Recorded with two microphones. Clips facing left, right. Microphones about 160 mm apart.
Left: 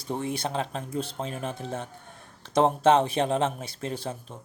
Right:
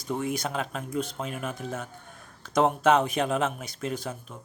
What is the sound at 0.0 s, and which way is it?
Speech, 30° left (ahead or behind).